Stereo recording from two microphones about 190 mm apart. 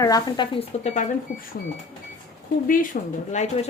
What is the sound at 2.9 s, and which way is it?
Speech, 45° left (ahead or behind).